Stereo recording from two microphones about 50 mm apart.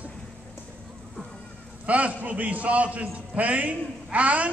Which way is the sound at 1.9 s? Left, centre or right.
Right.